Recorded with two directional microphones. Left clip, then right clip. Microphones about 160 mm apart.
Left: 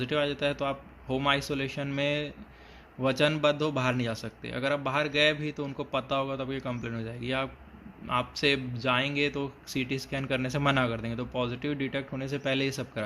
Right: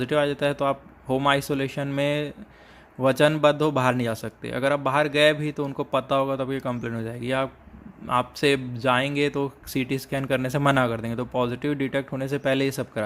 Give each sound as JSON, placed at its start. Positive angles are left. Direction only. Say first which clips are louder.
{"t": 0.0, "sound": "speech", "louder": "right 6 dB", "side_deg": -50}